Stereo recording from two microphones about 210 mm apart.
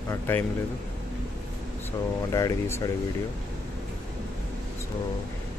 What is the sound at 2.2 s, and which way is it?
Speech, 15° left (ahead or behind).